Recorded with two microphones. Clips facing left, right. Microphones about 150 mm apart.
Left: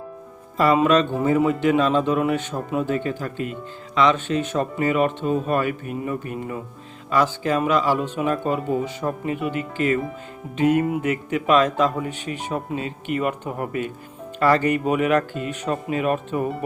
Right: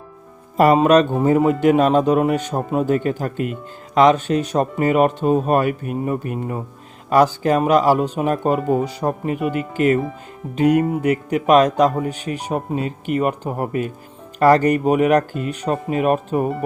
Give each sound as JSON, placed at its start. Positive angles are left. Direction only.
{"t": 0.5, "sound": "speech", "side_deg": -45}